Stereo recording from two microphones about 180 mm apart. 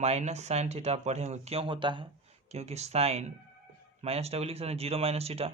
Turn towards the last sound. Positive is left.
turn(degrees=-35)  # may be behind; listen again after turning